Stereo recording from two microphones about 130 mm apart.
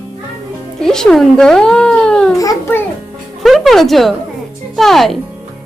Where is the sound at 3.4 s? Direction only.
Centre (ahead or behind).